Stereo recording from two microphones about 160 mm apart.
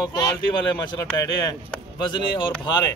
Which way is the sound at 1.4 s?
25° left (ahead or behind).